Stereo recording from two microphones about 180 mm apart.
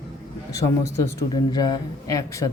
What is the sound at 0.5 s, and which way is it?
Speech, 15° left (ahead or behind).